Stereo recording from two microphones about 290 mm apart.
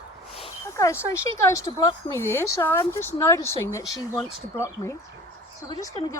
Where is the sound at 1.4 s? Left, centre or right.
Centre.